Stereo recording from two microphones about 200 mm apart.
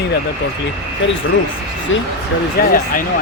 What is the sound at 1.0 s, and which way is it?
Speech, 75° left (ahead or behind).